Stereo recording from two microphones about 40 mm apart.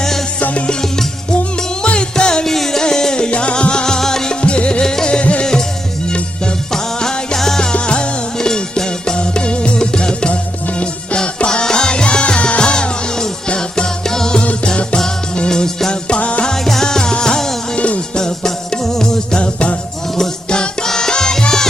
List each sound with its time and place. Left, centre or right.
0.7 s music: centre
3.2 s music: left
4.4 s music: left
5.2 s music: left
6.7 s music: centre
7.6 s music: left
11.4 s music: centre
15.4 s music: centre
16.6 s music: centre
17.7 s music: left
18.1 s music: centre
20.5 s music: centre